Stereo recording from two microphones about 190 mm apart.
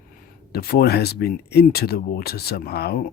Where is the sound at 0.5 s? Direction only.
55° left (ahead or behind).